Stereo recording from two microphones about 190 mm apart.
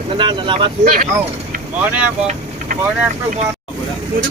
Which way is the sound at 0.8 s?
45° right (ahead or behind).